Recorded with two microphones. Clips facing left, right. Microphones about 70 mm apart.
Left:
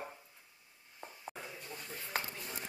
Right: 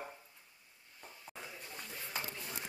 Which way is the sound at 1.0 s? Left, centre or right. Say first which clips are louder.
Left 6 dB; left.